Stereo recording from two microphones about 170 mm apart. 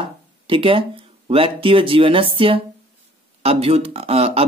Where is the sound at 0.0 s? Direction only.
30° right (ahead or behind).